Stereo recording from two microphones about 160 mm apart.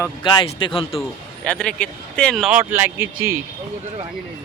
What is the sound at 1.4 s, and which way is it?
Speech, 5° left (ahead or behind).